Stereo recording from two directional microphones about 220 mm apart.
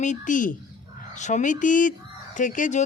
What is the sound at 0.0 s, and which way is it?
Speech, 35° left (ahead or behind).